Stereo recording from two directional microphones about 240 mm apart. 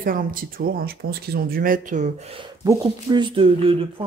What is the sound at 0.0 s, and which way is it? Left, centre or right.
Speech, right.